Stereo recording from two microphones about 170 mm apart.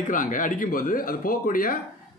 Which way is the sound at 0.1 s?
50° left (ahead or behind).